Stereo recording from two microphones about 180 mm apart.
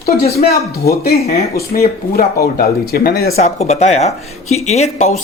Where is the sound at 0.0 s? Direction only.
60° left (ahead or behind).